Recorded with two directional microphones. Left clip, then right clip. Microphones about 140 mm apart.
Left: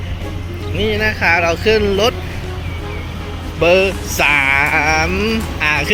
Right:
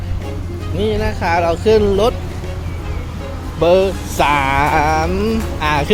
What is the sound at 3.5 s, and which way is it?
Mantra, 20° right (ahead or behind).